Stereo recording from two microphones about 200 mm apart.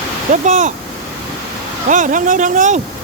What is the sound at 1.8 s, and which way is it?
Speech, 40° right (ahead or behind).